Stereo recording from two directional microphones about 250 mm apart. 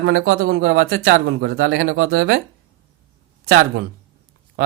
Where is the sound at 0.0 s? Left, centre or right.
Right.